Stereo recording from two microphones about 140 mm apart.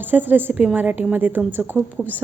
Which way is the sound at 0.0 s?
15° right (ahead or behind).